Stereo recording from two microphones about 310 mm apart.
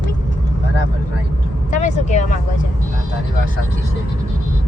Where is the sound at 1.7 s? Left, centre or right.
Left.